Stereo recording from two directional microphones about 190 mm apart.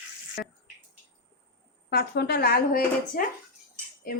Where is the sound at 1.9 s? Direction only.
55° left (ahead or behind).